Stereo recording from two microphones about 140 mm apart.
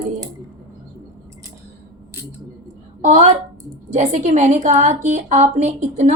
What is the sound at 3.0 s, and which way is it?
A woman's voice, 60° right (ahead or behind).